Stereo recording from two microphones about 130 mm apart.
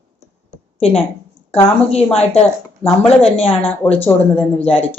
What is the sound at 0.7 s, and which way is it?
Speech, 50° left (ahead or behind).